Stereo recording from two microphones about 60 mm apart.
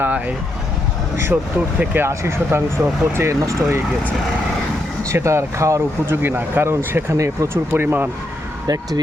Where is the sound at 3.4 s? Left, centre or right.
Right.